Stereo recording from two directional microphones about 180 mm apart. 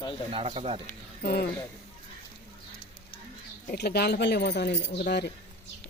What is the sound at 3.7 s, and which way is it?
Speech, 60° left (ahead or behind).